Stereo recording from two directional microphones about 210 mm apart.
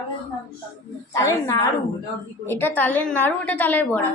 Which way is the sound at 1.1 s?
15° left (ahead or behind).